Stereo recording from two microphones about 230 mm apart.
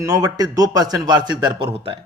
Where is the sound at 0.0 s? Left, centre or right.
Centre.